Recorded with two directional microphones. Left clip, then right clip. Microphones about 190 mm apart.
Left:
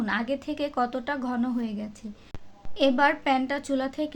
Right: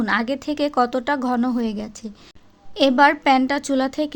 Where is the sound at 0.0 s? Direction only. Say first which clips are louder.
Right 7 dB; 40° right (ahead or behind).